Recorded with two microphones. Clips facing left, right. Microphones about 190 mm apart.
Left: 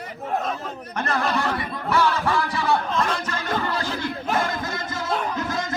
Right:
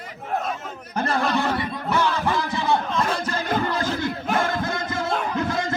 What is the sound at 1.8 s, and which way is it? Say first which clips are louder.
Music: left 2 dB; 20° right (ahead or behind).